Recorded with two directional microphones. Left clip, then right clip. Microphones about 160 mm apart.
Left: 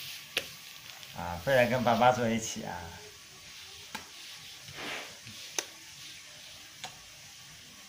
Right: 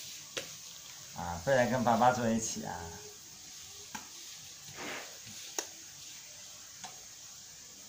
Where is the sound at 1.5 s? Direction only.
35° left (ahead or behind).